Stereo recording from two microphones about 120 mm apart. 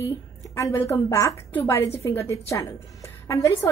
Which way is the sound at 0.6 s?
25° left (ahead or behind).